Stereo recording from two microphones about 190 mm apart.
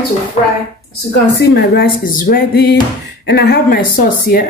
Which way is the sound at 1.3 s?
60° left (ahead or behind).